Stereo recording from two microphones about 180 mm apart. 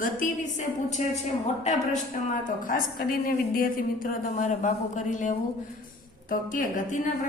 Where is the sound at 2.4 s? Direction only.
50° left (ahead or behind).